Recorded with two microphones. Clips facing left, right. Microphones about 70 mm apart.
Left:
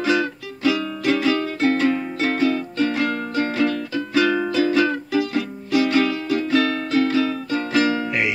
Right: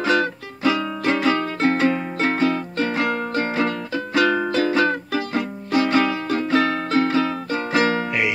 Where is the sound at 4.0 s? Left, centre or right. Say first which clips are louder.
Even; right.